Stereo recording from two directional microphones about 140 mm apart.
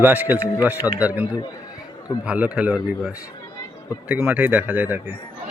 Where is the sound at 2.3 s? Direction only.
10° right (ahead or behind).